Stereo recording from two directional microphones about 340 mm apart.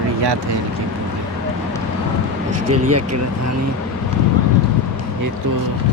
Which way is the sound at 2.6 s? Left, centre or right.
Right.